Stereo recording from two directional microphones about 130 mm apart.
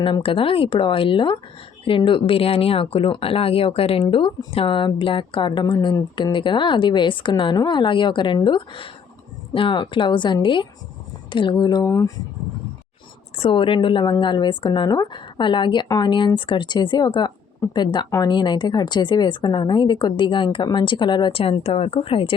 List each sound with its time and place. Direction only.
0.0 s speech: 40° left (ahead or behind); by 12.1 s 25° left (ahead or behind)
13.4 s speech: 40° left (ahead or behind)